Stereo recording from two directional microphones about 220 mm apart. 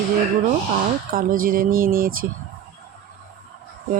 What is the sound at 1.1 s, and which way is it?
Speech, 40° right (ahead or behind).